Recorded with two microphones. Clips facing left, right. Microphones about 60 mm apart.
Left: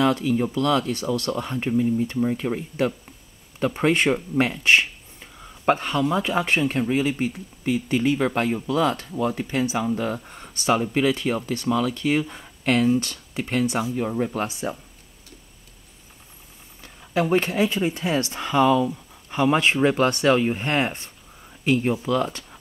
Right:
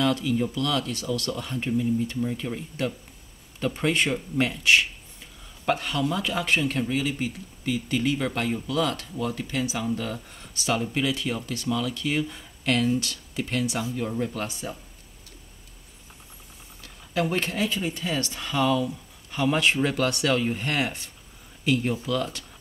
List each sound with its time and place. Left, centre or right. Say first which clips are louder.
0.0 s speech: left 3 dB; left
16.8 s speech: left 3 dB; centre